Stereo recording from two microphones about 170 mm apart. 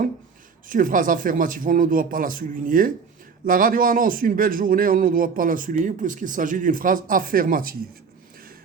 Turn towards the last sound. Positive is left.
turn(degrees=-55)  # may be behind; listen again after turning